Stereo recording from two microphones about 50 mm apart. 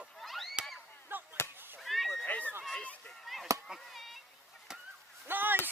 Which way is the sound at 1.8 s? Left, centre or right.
Centre.